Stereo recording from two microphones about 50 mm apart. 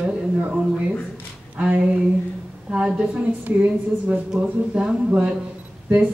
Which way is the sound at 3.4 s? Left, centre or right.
Right.